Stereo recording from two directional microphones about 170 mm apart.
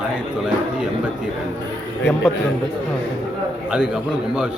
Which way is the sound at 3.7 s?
5° right (ahead or behind).